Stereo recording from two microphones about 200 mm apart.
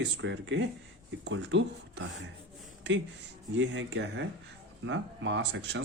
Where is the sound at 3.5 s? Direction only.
70° right (ahead or behind).